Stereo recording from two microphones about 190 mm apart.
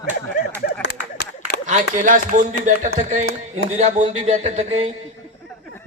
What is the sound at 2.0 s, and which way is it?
A man's voice, 45° right (ahead or behind).